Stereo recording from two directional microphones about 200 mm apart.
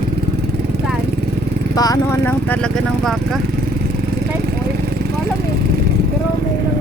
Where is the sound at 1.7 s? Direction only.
20° left (ahead or behind).